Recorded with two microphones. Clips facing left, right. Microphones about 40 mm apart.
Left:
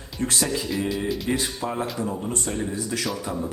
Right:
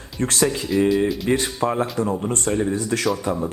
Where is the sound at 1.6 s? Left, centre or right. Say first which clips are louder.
Right 7 dB; right.